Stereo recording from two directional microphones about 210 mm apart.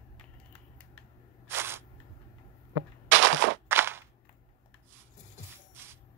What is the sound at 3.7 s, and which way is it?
Cap gun, 10° right (ahead or behind).